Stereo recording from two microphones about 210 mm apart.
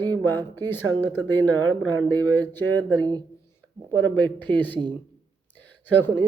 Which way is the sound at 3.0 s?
20° right (ahead or behind).